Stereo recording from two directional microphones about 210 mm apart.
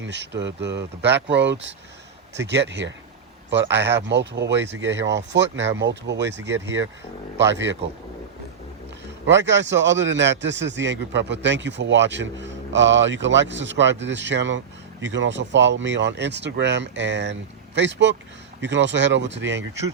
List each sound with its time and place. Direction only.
0.0 s a man's voice: 55° right (ahead or behind)
9.2 s a man's voice: 60° right (ahead or behind)